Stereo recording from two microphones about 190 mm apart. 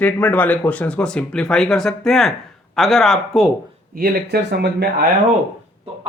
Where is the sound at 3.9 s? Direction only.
50° right (ahead or behind).